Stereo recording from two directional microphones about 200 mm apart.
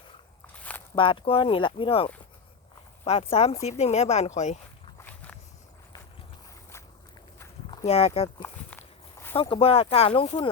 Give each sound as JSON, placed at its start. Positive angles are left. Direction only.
{"t": 0.9, "sound": "speech", "side_deg": 25}
{"t": 4.9, "sound": "walk", "side_deg": 10}
{"t": 7.3, "sound": "walk", "side_deg": 20}
{"t": 7.9, "sound": "speech", "side_deg": 30}
{"t": 9.3, "sound": "speech", "side_deg": 25}